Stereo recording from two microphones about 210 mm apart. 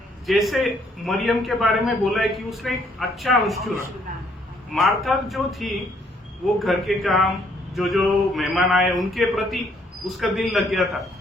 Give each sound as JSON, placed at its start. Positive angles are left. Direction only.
{"t": 0.3, "sound": "a man's voice", "side_deg": 0}
{"t": 4.7, "sound": "a man's voice", "side_deg": 0}